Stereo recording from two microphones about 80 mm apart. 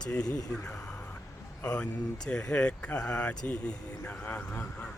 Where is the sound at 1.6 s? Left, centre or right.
Centre.